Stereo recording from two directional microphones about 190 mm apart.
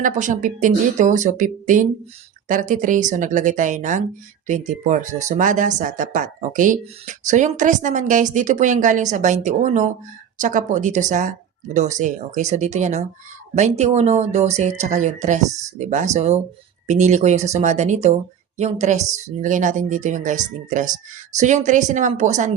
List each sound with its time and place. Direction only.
0.0 s speech: 40° right (ahead or behind)